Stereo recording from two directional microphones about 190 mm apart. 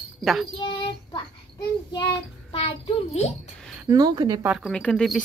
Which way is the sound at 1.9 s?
25° left (ahead or behind).